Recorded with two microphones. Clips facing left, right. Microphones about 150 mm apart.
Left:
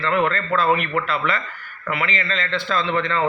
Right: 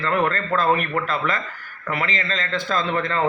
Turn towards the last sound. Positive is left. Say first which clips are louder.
# left 1 dB
turn(degrees=-45)  # may be behind; listen again after turning